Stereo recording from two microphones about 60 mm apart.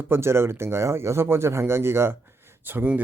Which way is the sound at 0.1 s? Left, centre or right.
Right.